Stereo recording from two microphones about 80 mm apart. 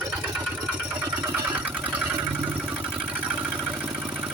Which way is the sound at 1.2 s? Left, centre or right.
Centre.